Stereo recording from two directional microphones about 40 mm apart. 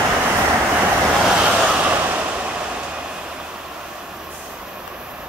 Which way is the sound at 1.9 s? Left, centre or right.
Right.